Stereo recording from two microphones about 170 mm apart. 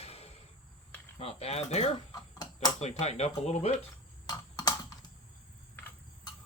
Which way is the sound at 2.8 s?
40° left (ahead or behind).